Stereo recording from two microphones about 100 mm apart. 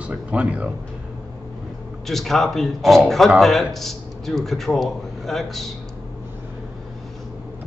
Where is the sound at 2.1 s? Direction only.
Centre (ahead or behind).